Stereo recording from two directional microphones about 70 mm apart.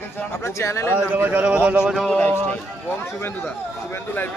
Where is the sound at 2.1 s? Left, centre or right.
Centre.